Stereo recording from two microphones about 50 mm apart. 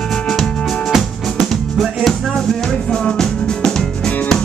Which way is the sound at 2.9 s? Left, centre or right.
Centre.